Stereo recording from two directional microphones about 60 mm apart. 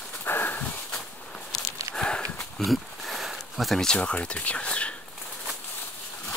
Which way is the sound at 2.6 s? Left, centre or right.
Centre.